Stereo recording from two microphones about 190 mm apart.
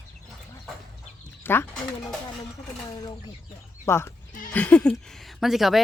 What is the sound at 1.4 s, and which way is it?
Speech, 10° left (ahead or behind).